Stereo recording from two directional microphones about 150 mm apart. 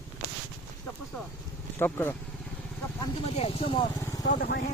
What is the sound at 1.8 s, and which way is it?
Speech, 15° left (ahead or behind).